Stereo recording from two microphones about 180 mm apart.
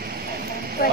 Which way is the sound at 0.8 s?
55° left (ahead or behind).